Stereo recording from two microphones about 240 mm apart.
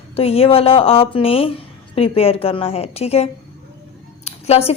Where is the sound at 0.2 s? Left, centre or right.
Left.